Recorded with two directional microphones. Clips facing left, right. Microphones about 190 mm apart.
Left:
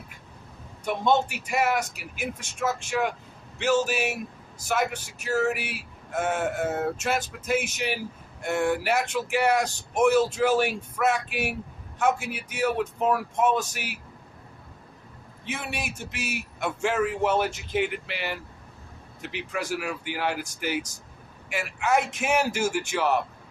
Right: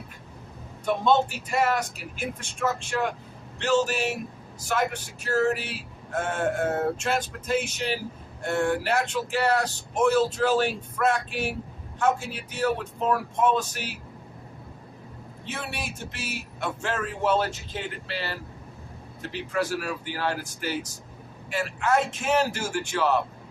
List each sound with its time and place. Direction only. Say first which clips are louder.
0.9 s speech: right 1 dB; 15° left (ahead or behind)
15.4 s speech: left 1 dB; 15° left (ahead or behind)